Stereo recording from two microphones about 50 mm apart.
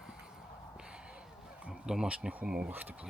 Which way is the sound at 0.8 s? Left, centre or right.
Centre.